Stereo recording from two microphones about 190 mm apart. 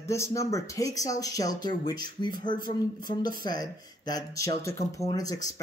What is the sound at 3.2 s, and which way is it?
Speech, 20° left (ahead or behind).